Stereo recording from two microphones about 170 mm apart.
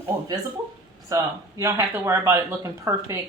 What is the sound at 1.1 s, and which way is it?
Speech, 15° right (ahead or behind).